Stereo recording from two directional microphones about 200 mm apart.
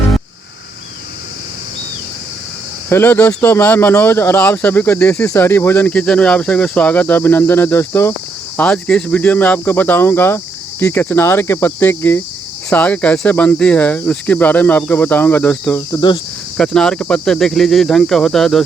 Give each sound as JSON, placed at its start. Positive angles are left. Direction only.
{"t": 2.9, "sound": "speech", "side_deg": 10}
{"t": 16.0, "sound": "speech", "side_deg": 20}
{"t": 16.6, "sound": "speech", "side_deg": 5}